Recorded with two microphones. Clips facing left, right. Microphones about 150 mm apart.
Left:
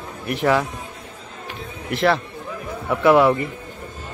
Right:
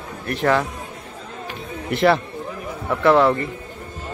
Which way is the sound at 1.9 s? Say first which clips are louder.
Right 2 dB; centre (ahead or behind).